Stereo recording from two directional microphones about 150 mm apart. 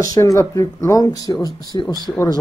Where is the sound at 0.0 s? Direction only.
20° left (ahead or behind).